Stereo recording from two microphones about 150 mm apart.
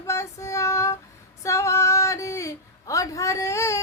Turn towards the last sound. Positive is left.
turn(degrees=20)  # may be behind; listen again after turning